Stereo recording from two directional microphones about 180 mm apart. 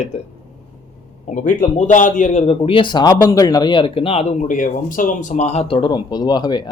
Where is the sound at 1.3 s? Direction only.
45° left (ahead or behind).